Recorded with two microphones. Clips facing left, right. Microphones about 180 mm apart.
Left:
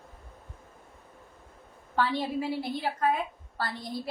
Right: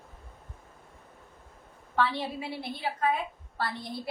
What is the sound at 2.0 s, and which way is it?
A woman's voice, 40° left (ahead or behind).